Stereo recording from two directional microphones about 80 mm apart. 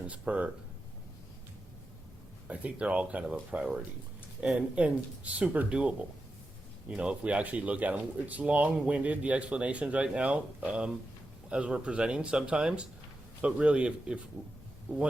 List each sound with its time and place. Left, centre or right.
0.0 s speech: centre
2.5 s speech: centre